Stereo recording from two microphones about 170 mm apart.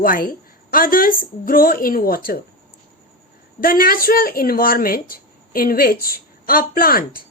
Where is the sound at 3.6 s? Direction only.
60° left (ahead or behind).